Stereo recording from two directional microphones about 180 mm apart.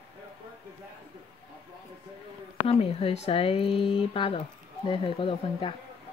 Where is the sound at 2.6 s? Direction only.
35° left (ahead or behind).